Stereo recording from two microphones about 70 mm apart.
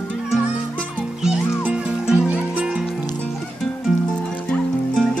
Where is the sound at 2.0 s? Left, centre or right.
Centre.